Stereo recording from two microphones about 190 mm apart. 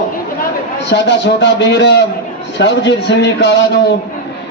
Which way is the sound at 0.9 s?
65° left (ahead or behind).